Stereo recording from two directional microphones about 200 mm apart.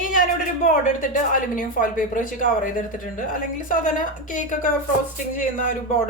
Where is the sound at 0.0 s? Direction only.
40° left (ahead or behind).